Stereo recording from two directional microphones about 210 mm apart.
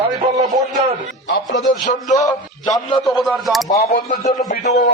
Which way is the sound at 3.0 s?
Centre (ahead or behind).